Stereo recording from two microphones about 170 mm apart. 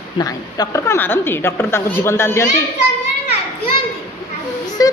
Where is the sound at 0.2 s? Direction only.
20° left (ahead or behind).